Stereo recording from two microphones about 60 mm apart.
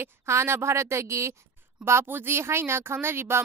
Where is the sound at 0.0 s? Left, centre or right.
Right.